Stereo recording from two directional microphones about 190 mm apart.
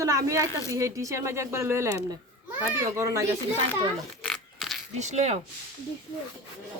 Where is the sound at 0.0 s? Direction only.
15° right (ahead or behind).